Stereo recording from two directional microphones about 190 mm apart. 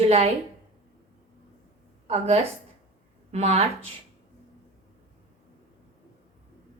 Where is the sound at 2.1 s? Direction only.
35° right (ahead or behind).